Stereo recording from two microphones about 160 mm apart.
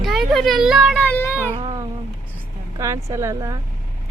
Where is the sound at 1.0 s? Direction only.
10° left (ahead or behind).